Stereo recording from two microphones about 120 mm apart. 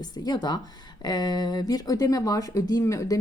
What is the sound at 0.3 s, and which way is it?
Speech, 35° left (ahead or behind).